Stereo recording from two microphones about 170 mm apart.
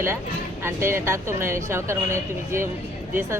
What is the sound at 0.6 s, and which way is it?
Speech, 15° right (ahead or behind).